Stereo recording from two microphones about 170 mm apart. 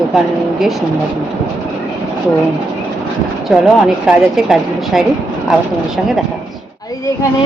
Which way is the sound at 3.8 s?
5° right (ahead or behind).